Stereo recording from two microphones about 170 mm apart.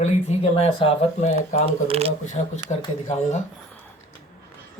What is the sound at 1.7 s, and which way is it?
Speech, 35° right (ahead or behind).